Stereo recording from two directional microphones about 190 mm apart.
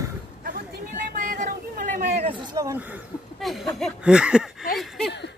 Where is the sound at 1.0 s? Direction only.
40° right (ahead or behind).